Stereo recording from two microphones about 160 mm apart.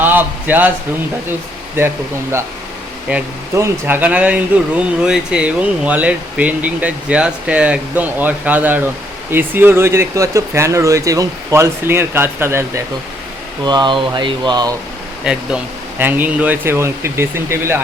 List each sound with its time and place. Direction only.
0.0 s a sound: 10° right (ahead or behind)
3.1 s speech: 15° right (ahead or behind)
13.7 s speech: 30° right (ahead or behind)
15.2 s speech: 5° right (ahead or behind)